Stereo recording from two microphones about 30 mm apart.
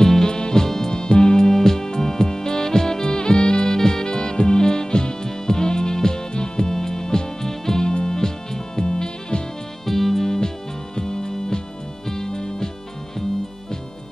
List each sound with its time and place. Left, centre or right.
0.0 s music: left
1.5 s music: centre
9.8 s music: centre